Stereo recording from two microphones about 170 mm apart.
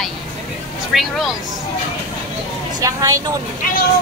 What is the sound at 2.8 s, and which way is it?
Speech, 20° right (ahead or behind).